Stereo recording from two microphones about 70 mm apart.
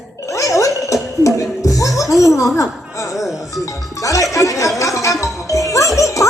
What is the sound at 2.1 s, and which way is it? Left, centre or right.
Speech, left.